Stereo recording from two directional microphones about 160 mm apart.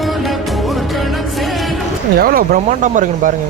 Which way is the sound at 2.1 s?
65° right (ahead or behind).